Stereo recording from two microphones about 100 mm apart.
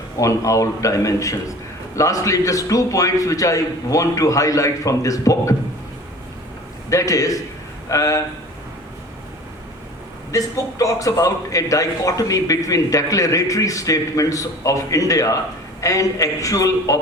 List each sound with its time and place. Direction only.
0.2 s a man's voice: 30° left (ahead or behind)
6.9 s a man's voice: 35° left (ahead or behind)
10.3 s a man's voice: 35° left (ahead or behind)